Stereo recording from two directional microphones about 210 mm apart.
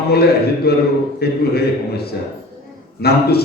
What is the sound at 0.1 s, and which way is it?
A man's voice, 50° left (ahead or behind).